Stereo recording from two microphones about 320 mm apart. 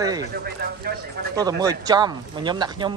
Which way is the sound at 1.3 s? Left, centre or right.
Centre.